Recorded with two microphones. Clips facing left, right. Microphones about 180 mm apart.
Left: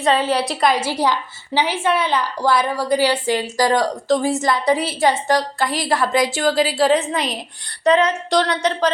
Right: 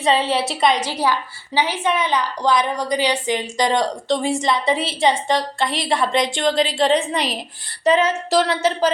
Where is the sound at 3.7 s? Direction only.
Centre (ahead or behind).